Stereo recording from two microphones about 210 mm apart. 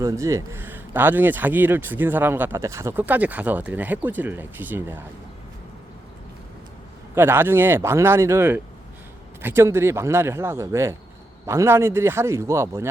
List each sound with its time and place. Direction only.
0.0 s a man's voice: 15° right (ahead or behind)
7.2 s a man's voice: 10° right (ahead or behind)